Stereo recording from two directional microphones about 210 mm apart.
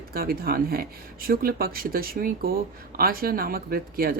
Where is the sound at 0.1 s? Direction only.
45° right (ahead or behind).